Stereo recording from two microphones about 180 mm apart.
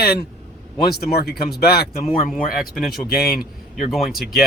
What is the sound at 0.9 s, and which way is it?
Speech, 60° left (ahead or behind).